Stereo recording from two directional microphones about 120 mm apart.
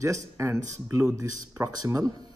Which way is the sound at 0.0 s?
25° right (ahead or behind).